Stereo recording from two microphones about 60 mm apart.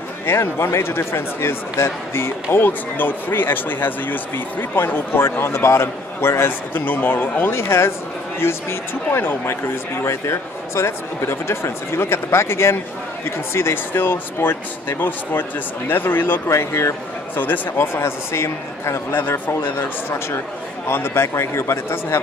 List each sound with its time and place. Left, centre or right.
0.3 s speech: left
16.4 s speech: left
17.9 s speech: left
19.5 s speech: left